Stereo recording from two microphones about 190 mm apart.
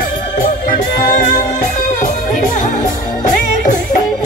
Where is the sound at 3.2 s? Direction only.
40° left (ahead or behind).